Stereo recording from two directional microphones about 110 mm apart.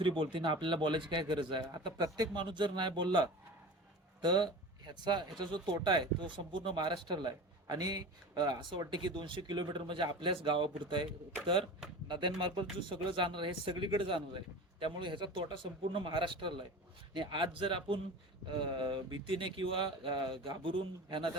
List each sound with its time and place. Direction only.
0.0 s speech: 50° right (ahead or behind)